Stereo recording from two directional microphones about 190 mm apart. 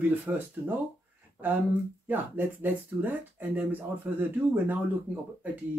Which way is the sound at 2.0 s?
10° right (ahead or behind).